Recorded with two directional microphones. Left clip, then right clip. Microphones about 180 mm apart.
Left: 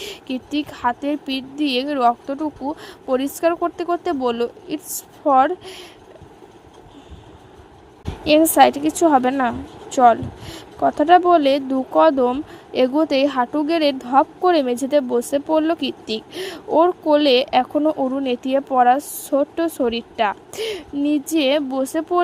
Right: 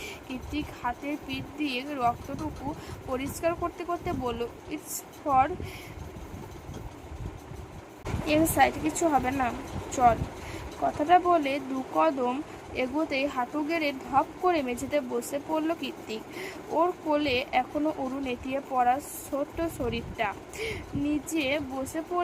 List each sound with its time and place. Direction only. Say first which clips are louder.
0.0 s speech: left 9 dB; 50° left (ahead or behind)
8.2 s a woman's voice: left 11 dB; 45° left (ahead or behind)